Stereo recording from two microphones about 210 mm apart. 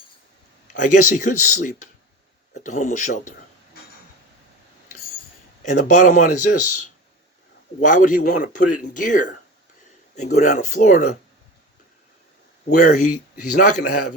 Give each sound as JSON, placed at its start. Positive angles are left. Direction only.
{"t": 0.7, "sound": "speech", "side_deg": 35}
{"t": 5.6, "sound": "speech", "side_deg": 35}
{"t": 6.6, "sound": "speech", "side_deg": 90}
{"t": 7.8, "sound": "speech", "side_deg": 35}
{"t": 12.8, "sound": "speech", "side_deg": 35}